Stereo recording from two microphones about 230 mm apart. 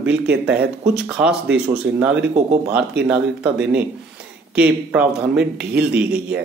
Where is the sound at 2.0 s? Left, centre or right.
Right.